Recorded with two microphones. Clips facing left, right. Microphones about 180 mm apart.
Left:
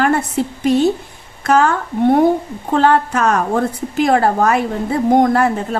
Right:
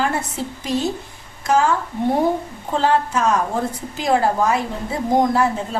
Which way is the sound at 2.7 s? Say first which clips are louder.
Left 4 dB; 60° left (ahead or behind).